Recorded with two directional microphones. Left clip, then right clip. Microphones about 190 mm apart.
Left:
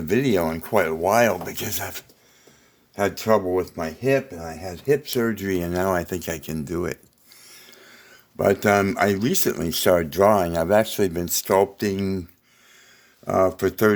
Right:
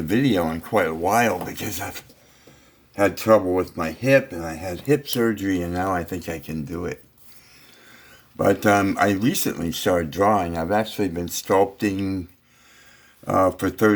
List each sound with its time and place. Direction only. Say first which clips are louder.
0.1 s speech: left 1 dB; 35° left (ahead or behind)
2.9 s speech: right 3 dB; 30° left (ahead or behind); by 6.9 s 60° left (ahead or behind)
7.9 s speech: even; 40° left (ahead or behind)
13.2 s speech: even; 35° left (ahead or behind)